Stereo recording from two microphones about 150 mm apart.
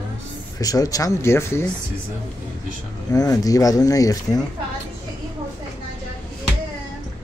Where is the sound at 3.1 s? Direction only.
25° left (ahead or behind).